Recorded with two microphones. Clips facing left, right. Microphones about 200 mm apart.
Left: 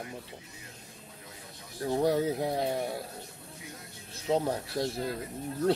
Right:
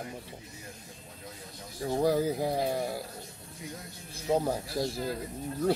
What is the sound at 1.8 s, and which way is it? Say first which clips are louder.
Speech: even; centre (ahead or behind).